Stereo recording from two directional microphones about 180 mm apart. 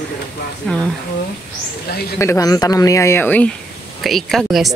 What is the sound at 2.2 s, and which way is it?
Speech, 15° left (ahead or behind).